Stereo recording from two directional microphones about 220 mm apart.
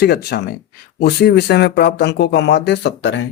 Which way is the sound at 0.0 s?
45° left (ahead or behind).